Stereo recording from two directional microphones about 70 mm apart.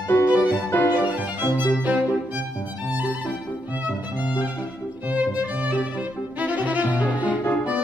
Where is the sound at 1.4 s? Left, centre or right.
Right.